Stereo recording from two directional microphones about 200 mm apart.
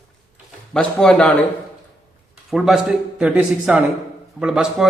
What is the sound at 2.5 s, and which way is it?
Speech, centre (ahead or behind).